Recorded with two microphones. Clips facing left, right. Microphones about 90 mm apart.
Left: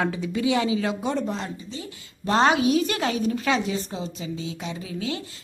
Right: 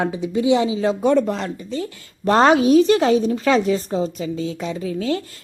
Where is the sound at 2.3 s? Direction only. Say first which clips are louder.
Right 6 dB; 45° right (ahead or behind).